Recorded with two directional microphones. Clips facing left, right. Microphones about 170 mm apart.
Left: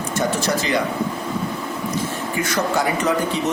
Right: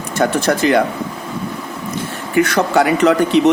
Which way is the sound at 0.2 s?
55° right (ahead or behind).